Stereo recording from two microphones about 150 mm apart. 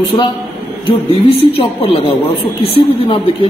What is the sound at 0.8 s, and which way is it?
A woman's voice, 40° left (ahead or behind).